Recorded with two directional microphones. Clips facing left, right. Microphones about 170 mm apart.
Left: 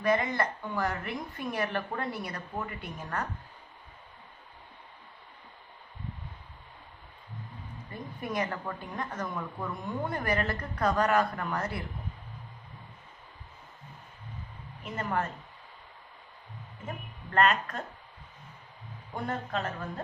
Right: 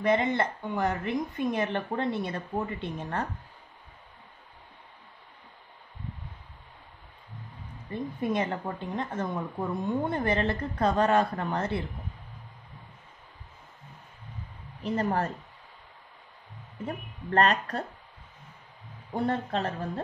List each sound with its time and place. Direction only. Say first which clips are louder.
0.0 s a woman's voice: right 2 dB; 25° right (ahead or behind)
7.9 s a woman's voice: right 6 dB; 25° right (ahead or behind)
14.8 s a woman's voice: right 5 dB; 35° right (ahead or behind)
16.8 s a woman's voice: right 6 dB; 35° right (ahead or behind)
19.1 s a woman's voice: right 5 dB; 35° right (ahead or behind)